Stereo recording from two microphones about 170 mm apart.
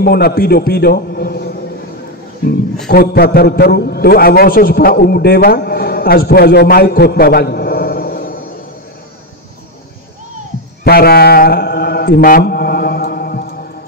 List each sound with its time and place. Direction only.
0.0 s a man's voice: 65° left (ahead or behind)
2.9 s a man's voice: 65° left (ahead or behind)
10.8 s mantra: 65° left (ahead or behind)